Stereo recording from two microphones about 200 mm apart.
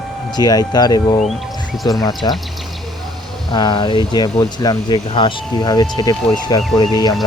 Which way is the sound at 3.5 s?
20° left (ahead or behind).